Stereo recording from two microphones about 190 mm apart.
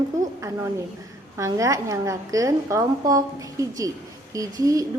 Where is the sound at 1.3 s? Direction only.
15° right (ahead or behind).